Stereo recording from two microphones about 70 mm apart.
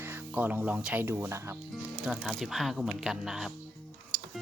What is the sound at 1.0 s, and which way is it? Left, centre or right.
Speech, right.